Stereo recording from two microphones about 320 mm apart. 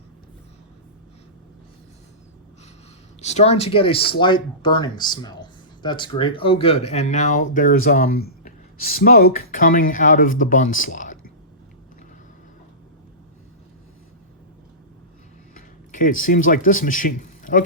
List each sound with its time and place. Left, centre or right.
3.2 s speech: left
15.5 s speech: left